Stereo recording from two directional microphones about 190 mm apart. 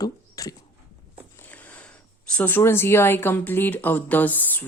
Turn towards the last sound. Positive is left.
turn(degrees=10)  # may be behind; listen again after turning